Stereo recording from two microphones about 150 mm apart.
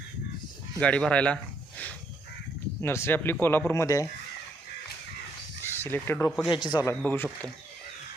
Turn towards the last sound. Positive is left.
turn(degrees=15)  # may be behind; listen again after turning